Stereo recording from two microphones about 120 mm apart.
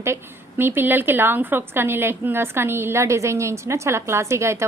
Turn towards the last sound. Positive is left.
turn(degrees=-25)  # may be behind; listen again after turning